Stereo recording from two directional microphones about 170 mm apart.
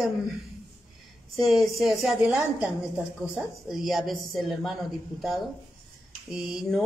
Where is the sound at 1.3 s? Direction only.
Centre (ahead or behind).